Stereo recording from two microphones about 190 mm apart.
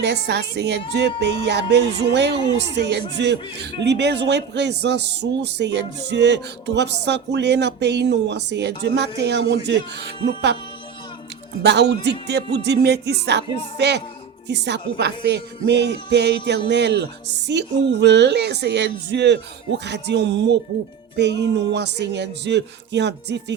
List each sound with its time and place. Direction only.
0.0 s speech: 65° right (ahead or behind)
11.6 s speech: 65° right (ahead or behind)